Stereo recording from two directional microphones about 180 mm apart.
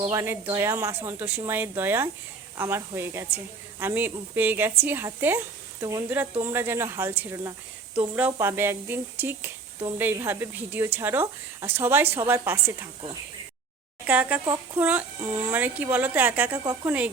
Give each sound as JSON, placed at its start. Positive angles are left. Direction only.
{"t": 0.1, "sound": "speech", "side_deg": -15}
{"t": 14.1, "sound": "speech", "side_deg": -10}
{"t": 14.4, "sound": "speech", "side_deg": -20}